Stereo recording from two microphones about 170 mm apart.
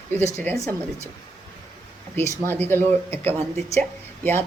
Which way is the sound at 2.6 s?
15° left (ahead or behind).